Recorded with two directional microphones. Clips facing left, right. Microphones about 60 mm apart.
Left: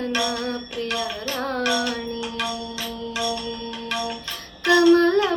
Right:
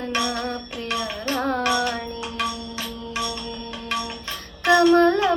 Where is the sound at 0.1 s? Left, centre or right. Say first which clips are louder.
Even; right.